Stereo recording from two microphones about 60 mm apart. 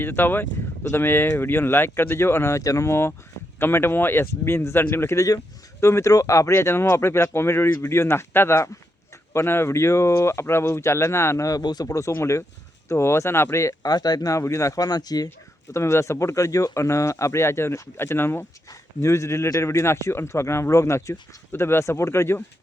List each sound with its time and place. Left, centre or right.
0.0 s speech: left
2.6 s speech: left
5.1 s speech: left
11.4 s speech: left
13.8 s speech: left
14.3 s speech: left
15.7 s speech: left
19.0 s speech: left